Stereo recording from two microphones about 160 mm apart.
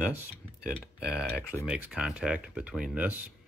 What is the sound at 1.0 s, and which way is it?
Speech, 15° left (ahead or behind).